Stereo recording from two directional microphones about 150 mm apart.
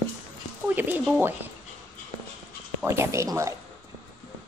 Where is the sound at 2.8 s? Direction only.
20° right (ahead or behind).